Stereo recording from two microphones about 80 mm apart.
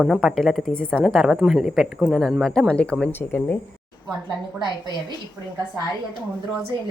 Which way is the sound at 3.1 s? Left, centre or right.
Left.